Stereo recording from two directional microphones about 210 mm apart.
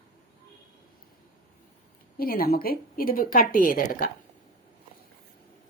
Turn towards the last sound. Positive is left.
turn(degrees=40)  # may be behind; listen again after turning